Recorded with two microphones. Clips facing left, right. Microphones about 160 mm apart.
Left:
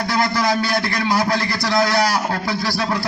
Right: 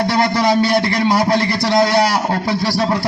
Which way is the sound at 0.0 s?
25° right (ahead or behind).